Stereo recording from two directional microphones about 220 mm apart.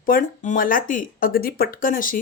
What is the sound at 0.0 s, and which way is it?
Speech, 40° left (ahead or behind).